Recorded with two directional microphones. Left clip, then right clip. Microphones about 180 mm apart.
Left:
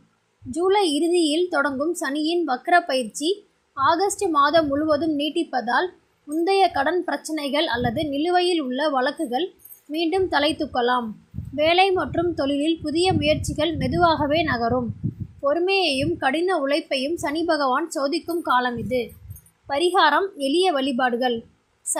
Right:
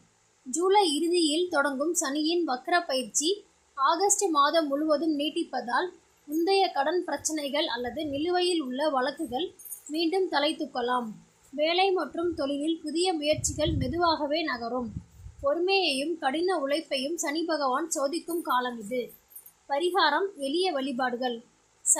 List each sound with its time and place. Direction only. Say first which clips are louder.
0.5 s a woman's voice: left 3 dB; 15° left (ahead or behind)